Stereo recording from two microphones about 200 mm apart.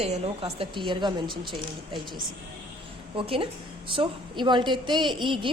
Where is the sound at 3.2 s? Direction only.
25° right (ahead or behind).